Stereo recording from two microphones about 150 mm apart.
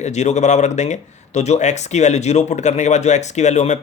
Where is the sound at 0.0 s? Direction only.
50° left (ahead or behind).